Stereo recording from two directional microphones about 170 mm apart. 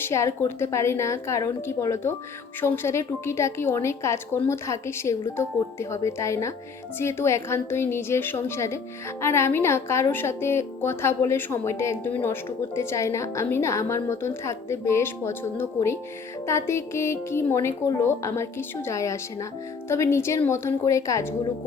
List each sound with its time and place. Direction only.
0.0 s a woman's voice: 15° left (ahead or behind)